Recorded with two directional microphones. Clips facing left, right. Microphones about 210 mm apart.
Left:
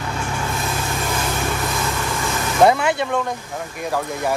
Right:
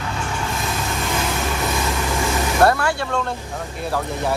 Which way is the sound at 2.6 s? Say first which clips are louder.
Left 3 dB; 20° left (ahead or behind).